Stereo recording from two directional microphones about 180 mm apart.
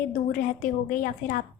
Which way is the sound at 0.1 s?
50° left (ahead or behind).